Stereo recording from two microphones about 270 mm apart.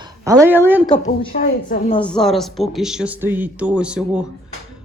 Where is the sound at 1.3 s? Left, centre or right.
Left.